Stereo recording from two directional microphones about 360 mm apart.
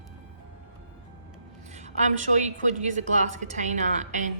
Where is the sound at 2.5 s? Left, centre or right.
Centre.